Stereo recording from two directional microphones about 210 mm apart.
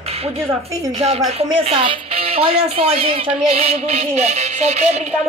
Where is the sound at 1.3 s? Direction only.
30° right (ahead or behind).